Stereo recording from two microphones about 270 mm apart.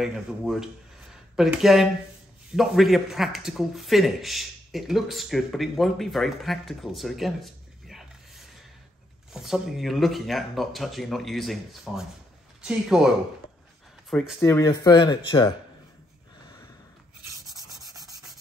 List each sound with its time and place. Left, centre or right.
0.0 s a man's voice: centre
14.4 s speech: centre
17.7 s rub: centre